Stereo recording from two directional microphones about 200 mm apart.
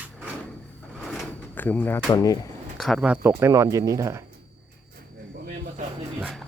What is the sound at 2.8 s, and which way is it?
Speech, centre (ahead or behind).